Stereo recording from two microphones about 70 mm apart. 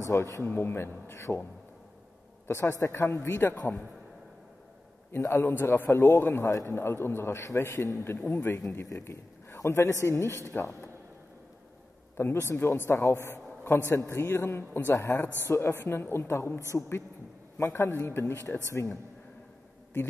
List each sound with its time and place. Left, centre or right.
0.0 s a man's voice: left
0.4 s a man's voice: left
2.4 s a man's voice: left
5.2 s a man's voice: left
5.5 s a man's voice: left
12.2 s a man's voice: left
15.0 s a man's voice: left